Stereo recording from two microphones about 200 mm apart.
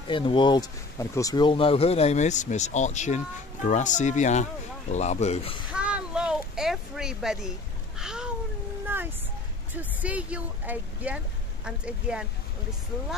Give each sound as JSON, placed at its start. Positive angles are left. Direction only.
{"t": 0.1, "sound": "speech", "side_deg": 25}
{"t": 5.7, "sound": "a sound", "side_deg": -5}
{"t": 9.8, "sound": "speech", "side_deg": -5}